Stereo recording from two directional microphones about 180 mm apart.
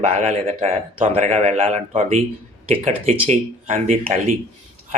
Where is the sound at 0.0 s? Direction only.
40° right (ahead or behind).